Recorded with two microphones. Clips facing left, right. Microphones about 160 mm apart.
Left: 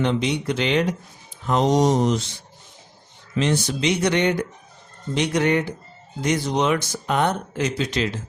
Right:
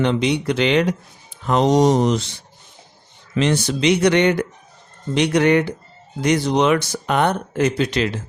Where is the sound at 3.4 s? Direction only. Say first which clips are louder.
Right 3 dB; 75° right (ahead or behind).